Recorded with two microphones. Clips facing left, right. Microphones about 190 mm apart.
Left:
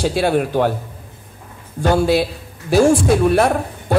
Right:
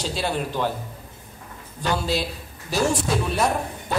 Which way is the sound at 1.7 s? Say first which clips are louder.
Left 9 dB; 50° left (ahead or behind).